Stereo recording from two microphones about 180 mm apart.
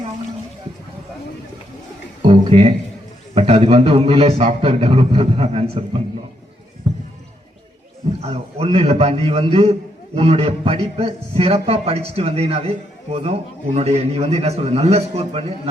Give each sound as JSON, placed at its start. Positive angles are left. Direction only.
{"t": 2.2, "sound": "a man's voice", "side_deg": -35}
{"t": 6.8, "sound": "basketball bounce", "side_deg": -35}
{"t": 8.2, "sound": "a man's voice", "side_deg": -35}